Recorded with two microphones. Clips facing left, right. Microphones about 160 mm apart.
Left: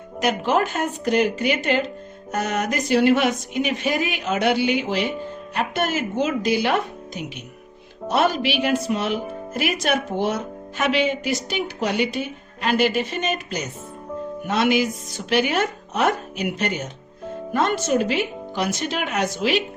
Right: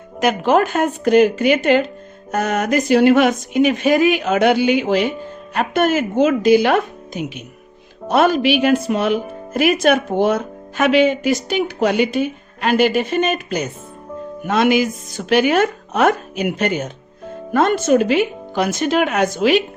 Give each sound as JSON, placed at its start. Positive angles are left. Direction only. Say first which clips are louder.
{"t": 0.2, "sound": "speech", "louder": "right 5 dB", "side_deg": -55}